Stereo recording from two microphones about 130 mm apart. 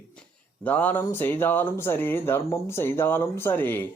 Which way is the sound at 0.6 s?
10° left (ahead or behind).